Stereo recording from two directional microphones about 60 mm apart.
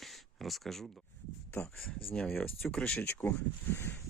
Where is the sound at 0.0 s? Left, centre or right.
Centre.